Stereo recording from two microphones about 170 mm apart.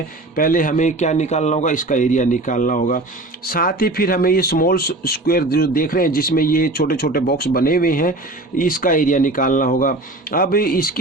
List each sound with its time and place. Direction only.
0.3 s a man's voice: 55° left (ahead or behind)